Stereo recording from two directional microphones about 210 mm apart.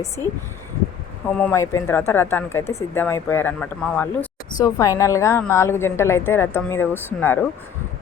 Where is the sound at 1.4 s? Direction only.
10° left (ahead or behind).